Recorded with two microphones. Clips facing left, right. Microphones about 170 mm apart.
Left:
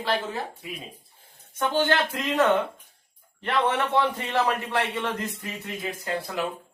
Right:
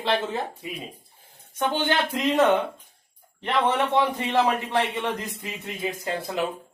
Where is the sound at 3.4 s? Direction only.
20° right (ahead or behind).